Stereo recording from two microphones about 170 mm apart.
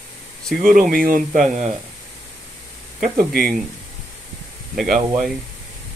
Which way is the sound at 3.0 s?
55° right (ahead or behind).